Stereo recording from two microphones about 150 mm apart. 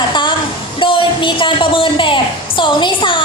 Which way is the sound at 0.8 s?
35° left (ahead or behind).